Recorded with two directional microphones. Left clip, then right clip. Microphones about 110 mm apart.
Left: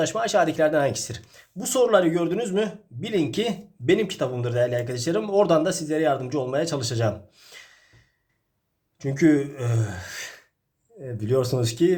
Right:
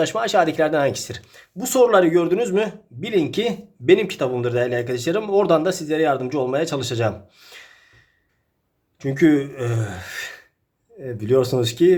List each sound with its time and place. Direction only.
0.0 s speech: 20° right (ahead or behind)
3.0 s speech: 15° right (ahead or behind)
9.0 s speech: 20° right (ahead or behind)